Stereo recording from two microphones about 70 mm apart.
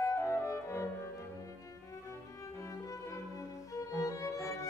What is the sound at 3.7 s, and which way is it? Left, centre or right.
Violin, left.